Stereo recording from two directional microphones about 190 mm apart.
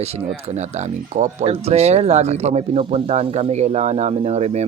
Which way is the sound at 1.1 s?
35° right (ahead or behind).